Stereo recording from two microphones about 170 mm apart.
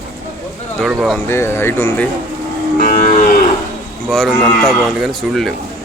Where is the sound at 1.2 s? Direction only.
15° left (ahead or behind).